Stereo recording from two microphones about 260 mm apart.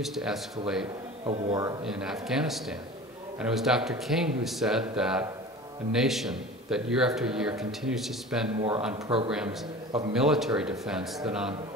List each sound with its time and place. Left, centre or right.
0.0 s speech: centre
1.2 s a man's voice: centre
1.9 s speech: centre
8.9 s a man's voice: centre
9.3 s speech: centre